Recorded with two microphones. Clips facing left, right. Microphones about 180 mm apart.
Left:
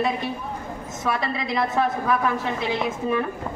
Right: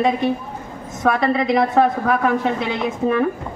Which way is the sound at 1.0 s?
55° right (ahead or behind).